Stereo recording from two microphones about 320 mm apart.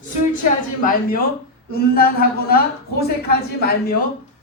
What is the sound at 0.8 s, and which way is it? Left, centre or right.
A woman's voice, left.